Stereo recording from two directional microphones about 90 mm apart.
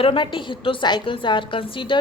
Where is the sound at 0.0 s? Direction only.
70° left (ahead or behind).